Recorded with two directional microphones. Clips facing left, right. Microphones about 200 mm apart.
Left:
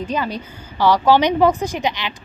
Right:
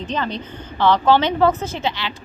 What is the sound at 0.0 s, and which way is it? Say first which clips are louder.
A woman's voice: left 1 dB; 10° left (ahead or behind).